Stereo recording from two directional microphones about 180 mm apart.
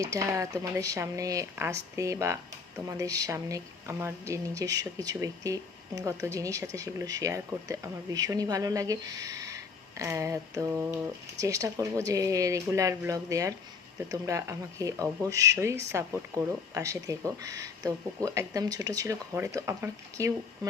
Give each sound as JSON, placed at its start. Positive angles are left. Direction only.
{"t": 0.0, "sound": "speech", "side_deg": -15}